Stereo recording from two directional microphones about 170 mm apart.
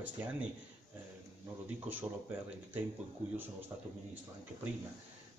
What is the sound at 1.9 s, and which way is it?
Speech, 10° right (ahead or behind).